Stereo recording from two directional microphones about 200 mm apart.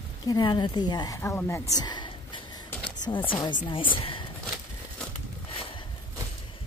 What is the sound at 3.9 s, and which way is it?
Speech, 25° left (ahead or behind).